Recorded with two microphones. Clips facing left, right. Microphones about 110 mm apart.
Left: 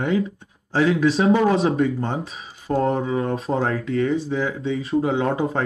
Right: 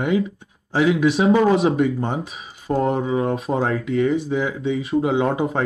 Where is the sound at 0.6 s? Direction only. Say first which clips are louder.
Right 1 dB; 10° right (ahead or behind).